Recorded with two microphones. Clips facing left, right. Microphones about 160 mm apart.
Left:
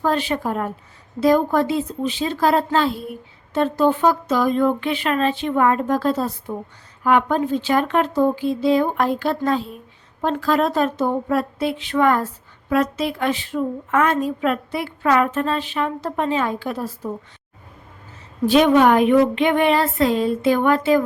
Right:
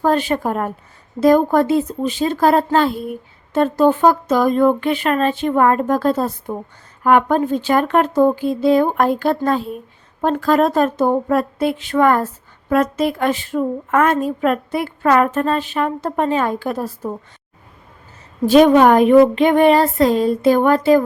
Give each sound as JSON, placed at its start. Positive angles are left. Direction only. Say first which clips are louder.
{"t": 0.0, "sound": "a woman's voice", "louder": "right 4 dB", "side_deg": -45}
{"t": 18.4, "sound": "speech", "louder": "right 4 dB", "side_deg": -40}